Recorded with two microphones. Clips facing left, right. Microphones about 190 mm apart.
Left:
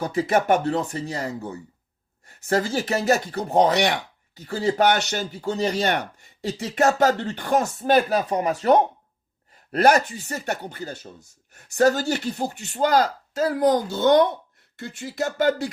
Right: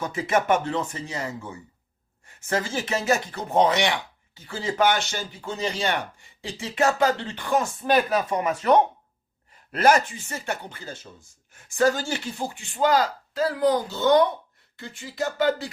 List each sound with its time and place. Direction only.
0.0 s speech: 35° left (ahead or behind)